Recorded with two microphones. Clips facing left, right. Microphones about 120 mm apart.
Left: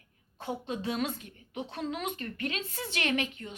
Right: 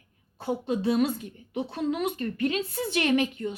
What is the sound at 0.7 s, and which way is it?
Speech, 35° right (ahead or behind).